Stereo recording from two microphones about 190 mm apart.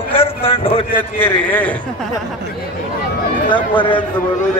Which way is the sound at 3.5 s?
25° left (ahead or behind).